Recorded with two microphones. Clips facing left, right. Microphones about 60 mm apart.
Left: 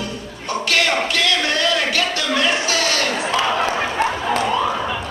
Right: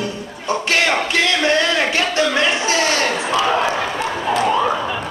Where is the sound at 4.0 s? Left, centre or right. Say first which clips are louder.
Left 3 dB; left.